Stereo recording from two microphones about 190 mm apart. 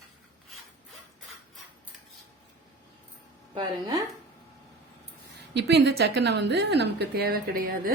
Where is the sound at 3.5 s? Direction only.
20° right (ahead or behind).